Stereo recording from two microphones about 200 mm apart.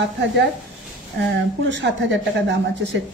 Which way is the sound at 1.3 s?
60° right (ahead or behind).